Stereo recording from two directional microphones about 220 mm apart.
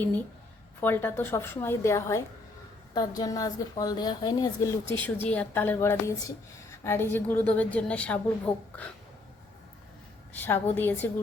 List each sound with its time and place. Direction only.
0.8 s a woman's voice: 10° left (ahead or behind)
10.3 s a woman's voice: 10° left (ahead or behind)